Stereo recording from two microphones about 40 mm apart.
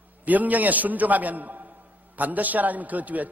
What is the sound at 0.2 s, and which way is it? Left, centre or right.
A man's voice, right.